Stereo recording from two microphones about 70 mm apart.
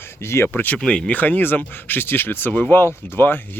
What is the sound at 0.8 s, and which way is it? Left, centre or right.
Speech, centre.